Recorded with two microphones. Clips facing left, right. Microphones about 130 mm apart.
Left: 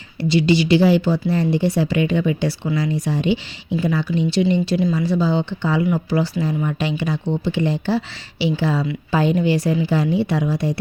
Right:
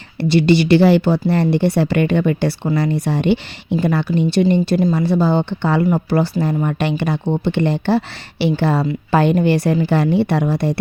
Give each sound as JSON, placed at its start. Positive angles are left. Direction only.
{"t": 0.2, "sound": "speech", "side_deg": -60}